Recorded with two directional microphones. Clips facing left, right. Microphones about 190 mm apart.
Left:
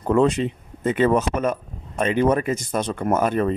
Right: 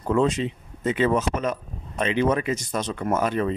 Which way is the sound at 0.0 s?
55° left (ahead or behind).